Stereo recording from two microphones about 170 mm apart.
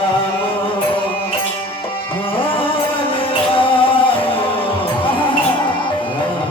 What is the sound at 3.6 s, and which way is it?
Music, 30° left (ahead or behind).